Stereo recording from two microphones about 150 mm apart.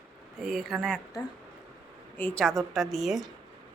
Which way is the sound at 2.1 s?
10° left (ahead or behind).